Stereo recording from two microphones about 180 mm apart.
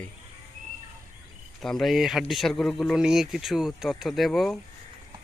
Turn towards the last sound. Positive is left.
turn(degrees=0)  # may be behind; listen again after turning